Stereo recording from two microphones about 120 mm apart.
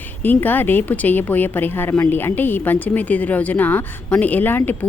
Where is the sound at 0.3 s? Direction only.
15° left (ahead or behind).